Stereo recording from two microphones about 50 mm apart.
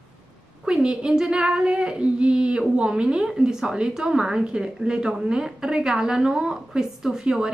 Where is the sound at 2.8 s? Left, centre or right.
Centre.